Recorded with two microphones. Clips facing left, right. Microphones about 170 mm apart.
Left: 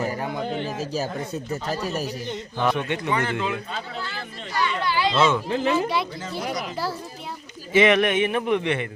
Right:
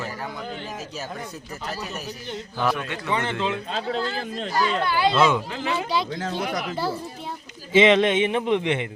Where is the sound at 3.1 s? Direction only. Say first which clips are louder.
Right 2 dB; 20° right (ahead or behind).